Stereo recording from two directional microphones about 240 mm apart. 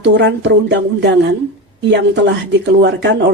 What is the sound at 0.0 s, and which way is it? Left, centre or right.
Speech, right.